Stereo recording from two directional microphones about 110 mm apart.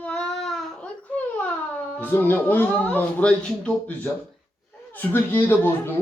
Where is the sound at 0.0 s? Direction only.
10° left (ahead or behind).